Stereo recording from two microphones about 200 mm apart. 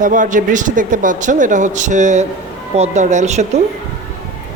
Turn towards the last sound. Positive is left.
turn(degrees=-35)  # may be behind; listen again after turning